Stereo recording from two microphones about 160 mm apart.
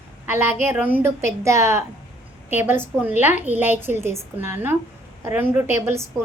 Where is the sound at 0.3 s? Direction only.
15° right (ahead or behind).